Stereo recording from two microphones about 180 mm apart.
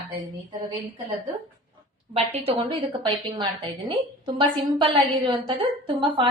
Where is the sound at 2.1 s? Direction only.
35° right (ahead or behind).